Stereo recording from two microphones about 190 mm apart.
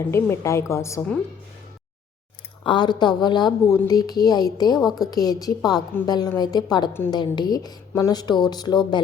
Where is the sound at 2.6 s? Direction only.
25° left (ahead or behind).